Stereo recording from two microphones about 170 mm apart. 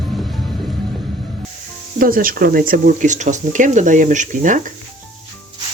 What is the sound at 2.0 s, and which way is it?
Speech, 55° right (ahead or behind).